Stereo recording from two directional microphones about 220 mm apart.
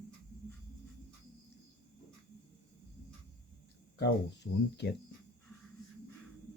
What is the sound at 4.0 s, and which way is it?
Speech, 50° left (ahead or behind).